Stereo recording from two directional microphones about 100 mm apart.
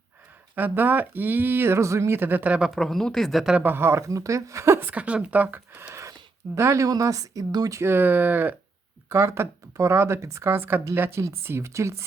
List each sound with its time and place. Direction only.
0.5 s speech: 20° right (ahead or behind)
2.7 s speech: centre (ahead or behind)
3.5 s speech: 20° right (ahead or behind)
5.9 s a sound: 30° right (ahead or behind)
6.6 s speech: 30° right (ahead or behind)